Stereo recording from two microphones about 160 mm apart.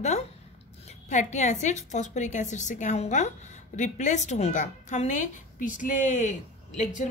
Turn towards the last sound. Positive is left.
turn(degrees=50)  # may be behind; listen again after turning